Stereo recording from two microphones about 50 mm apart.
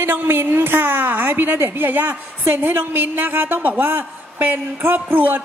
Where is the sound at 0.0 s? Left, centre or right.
Right.